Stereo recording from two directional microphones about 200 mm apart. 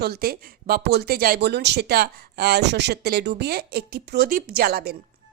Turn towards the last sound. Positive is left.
turn(degrees=-50)  # may be behind; listen again after turning